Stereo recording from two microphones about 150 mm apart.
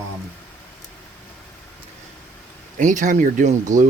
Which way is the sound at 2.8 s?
60° right (ahead or behind).